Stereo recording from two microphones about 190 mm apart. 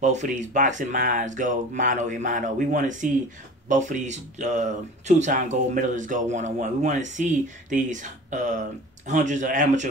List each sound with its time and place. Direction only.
0.0 s speech: 40° right (ahead or behind)